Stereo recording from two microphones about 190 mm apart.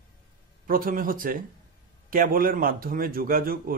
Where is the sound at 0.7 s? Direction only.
45° right (ahead or behind).